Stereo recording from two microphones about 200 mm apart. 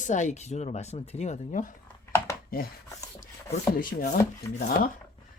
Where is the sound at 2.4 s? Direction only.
50° left (ahead or behind).